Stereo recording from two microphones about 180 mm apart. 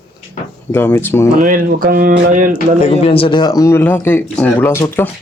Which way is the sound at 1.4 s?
50° right (ahead or behind).